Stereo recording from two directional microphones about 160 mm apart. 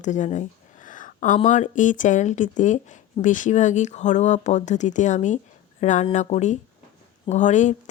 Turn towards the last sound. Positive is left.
turn(degrees=50)  # may be behind; listen again after turning